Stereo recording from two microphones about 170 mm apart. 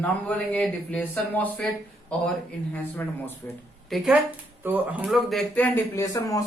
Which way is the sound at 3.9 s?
5° right (ahead or behind).